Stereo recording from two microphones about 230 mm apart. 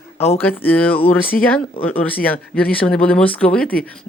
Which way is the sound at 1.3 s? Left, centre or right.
Left.